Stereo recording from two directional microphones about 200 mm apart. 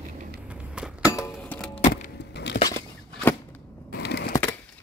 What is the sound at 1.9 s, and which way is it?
Vehicle, 55° left (ahead or behind).